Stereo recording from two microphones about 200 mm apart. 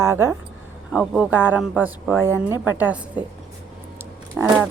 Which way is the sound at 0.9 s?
5° right (ahead or behind).